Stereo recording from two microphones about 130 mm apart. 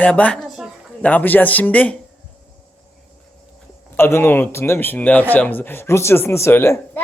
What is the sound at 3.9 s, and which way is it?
A woman's voice, 15° left (ahead or behind).